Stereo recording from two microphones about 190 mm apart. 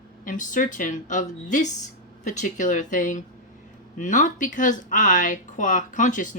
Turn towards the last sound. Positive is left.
turn(degrees=40)  # may be behind; listen again after turning